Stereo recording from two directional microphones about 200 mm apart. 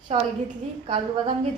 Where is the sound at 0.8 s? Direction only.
30° right (ahead or behind).